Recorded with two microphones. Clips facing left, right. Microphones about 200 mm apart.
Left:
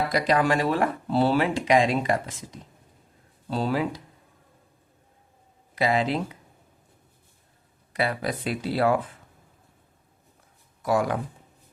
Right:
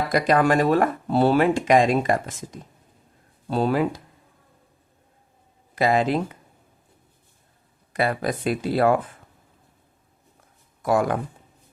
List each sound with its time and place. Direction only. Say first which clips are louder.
0.1 s speech: right 6 dB; 50° right (ahead or behind)
5.7 s speech: right 3 dB; 45° right (ahead or behind)
7.9 s speech: right 3 dB; 50° right (ahead or behind)
10.8 s speech: right 3 dB; 50° right (ahead or behind)